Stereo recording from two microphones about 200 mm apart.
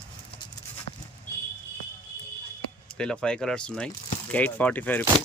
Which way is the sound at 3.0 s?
5° left (ahead or behind).